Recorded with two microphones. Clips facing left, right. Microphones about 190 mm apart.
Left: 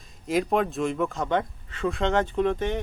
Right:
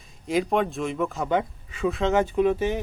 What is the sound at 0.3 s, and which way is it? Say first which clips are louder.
Speech: even; centre (ahead or behind).